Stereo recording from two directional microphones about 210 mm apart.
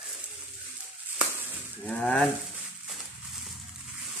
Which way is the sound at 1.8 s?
5° left (ahead or behind).